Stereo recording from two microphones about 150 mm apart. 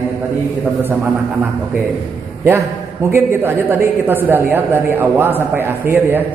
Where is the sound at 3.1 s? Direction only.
15° right (ahead or behind).